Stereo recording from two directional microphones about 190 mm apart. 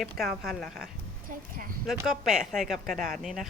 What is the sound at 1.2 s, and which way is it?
Speech, 45° right (ahead or behind).